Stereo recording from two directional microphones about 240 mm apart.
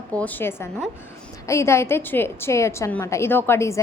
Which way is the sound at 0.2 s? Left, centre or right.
Centre.